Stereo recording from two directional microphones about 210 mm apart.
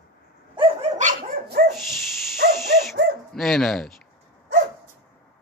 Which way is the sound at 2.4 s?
55° right (ahead or behind).